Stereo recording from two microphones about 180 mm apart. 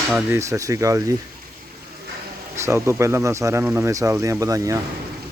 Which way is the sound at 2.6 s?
15° right (ahead or behind).